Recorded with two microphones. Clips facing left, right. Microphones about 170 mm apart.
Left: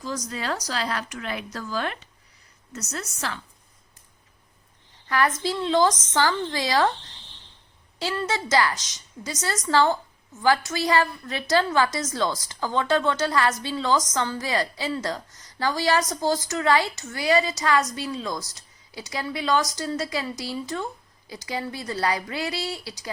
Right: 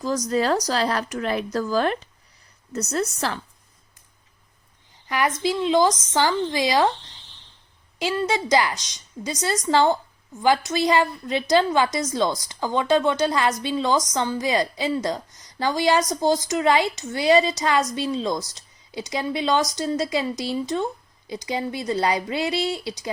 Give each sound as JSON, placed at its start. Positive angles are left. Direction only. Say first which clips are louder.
{"t": 0.0, "sound": "speech", "louder": "right 8 dB", "side_deg": -40}
{"t": 5.0, "sound": "a woman's voice", "louder": "right 1 dB", "side_deg": -15}
{"t": 7.9, "sound": "a woman's voice", "louder": "right 4 dB", "side_deg": -15}